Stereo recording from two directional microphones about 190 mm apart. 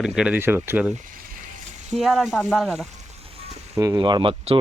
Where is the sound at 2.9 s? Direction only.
35° right (ahead or behind).